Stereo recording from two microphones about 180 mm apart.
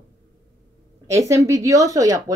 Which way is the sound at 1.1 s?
15° right (ahead or behind).